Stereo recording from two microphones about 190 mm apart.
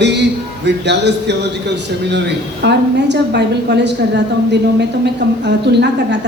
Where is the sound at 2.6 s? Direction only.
60° right (ahead or behind).